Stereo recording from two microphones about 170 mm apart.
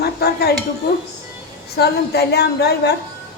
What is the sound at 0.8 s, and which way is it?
A woman's voice, 70° left (ahead or behind).